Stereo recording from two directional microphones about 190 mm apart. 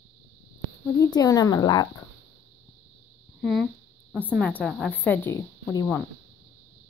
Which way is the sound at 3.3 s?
Centre (ahead or behind).